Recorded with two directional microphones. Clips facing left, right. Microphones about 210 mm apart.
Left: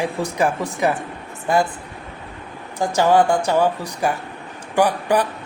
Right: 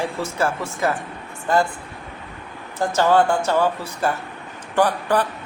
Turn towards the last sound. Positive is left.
turn(degrees=15)  # may be behind; listen again after turning